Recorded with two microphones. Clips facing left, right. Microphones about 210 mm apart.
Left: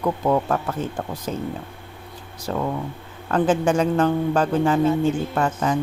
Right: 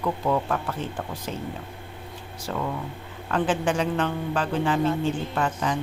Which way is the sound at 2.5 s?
40° left (ahead or behind).